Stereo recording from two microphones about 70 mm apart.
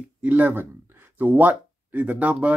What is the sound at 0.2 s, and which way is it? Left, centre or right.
Speech, right.